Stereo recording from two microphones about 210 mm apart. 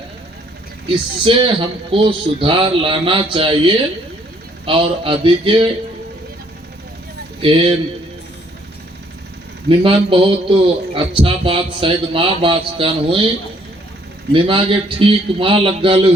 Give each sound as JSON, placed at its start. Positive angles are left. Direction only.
{"t": 1.2, "sound": "speech", "side_deg": -25}
{"t": 7.4, "sound": "speech", "side_deg": -25}
{"t": 9.6, "sound": "speech", "side_deg": -25}
{"t": 14.3, "sound": "speech", "side_deg": -25}